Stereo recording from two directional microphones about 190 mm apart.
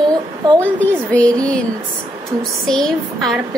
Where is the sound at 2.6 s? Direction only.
Centre (ahead or behind).